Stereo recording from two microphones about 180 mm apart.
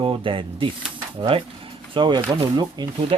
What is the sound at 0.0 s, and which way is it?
Speech, 30° right (ahead or behind).